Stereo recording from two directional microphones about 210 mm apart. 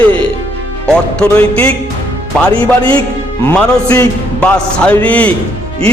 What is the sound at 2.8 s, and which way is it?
Speech, 25° right (ahead or behind).